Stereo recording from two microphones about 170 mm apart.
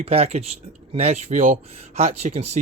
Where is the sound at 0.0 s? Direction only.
35° right (ahead or behind).